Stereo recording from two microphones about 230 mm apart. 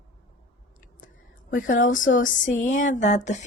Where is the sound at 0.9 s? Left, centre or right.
Left.